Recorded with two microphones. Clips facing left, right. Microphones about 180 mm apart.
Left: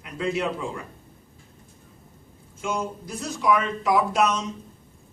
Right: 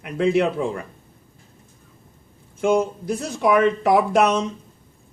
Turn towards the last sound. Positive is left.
turn(degrees=-60)  # may be behind; listen again after turning